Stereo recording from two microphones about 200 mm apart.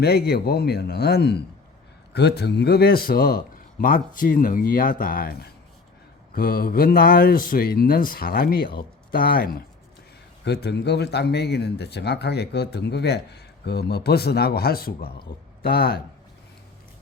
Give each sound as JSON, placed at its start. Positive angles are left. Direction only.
{"t": 0.0, "sound": "speech", "side_deg": 55}